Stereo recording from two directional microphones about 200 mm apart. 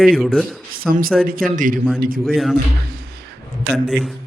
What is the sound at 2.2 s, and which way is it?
Speech, centre (ahead or behind).